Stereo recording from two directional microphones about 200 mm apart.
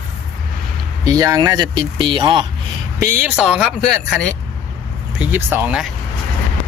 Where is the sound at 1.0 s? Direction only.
15° right (ahead or behind).